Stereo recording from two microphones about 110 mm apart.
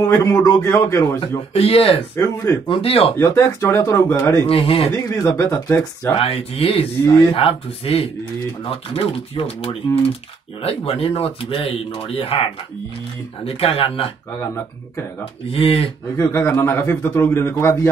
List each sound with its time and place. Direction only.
0.0 s a man's voice: 30° left (ahead or behind)
1.5 s speech: 60° left (ahead or behind)
2.1 s a man's voice: 25° left (ahead or behind)
2.7 s speech: 60° left (ahead or behind)
3.2 s a man's voice: 25° left (ahead or behind)
4.5 s speech: 55° left (ahead or behind)
4.9 s a man's voice: 30° left (ahead or behind)
6.1 s speech: 60° left (ahead or behind)
15.5 s speech: 60° left (ahead or behind)
16.2 s a man's voice: 25° left (ahead or behind)